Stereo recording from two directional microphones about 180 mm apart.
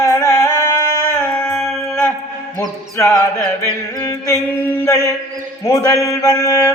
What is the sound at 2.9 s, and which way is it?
Chant, 15° left (ahead or behind).